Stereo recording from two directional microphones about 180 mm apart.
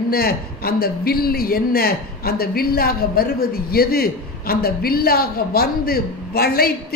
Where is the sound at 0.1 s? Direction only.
55° left (ahead or behind).